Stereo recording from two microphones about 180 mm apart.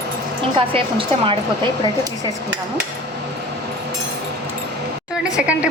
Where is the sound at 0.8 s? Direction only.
30° right (ahead or behind).